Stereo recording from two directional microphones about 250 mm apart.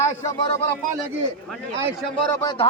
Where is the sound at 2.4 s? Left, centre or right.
Centre.